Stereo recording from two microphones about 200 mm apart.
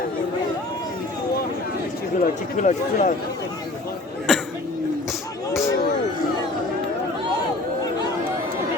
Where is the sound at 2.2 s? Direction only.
40° left (ahead or behind).